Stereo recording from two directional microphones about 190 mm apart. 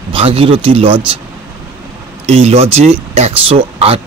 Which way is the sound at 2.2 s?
35° right (ahead or behind).